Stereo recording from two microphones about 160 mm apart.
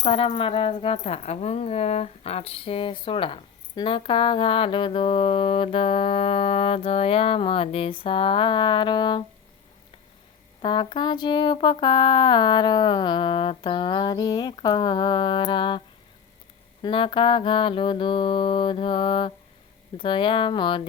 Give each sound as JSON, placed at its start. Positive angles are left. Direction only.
{"t": 0.0, "sound": "speech", "side_deg": 35}
{"t": 10.6, "sound": "a sound", "side_deg": 30}
{"t": 16.8, "sound": "speech", "side_deg": 30}